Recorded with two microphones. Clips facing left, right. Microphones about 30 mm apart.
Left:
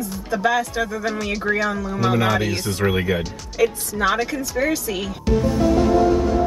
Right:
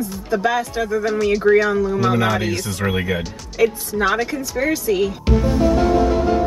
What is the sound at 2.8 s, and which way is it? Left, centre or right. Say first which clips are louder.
Speech: left 2 dB; centre.